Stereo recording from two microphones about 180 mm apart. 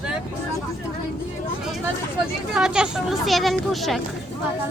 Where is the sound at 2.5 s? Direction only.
5° right (ahead or behind).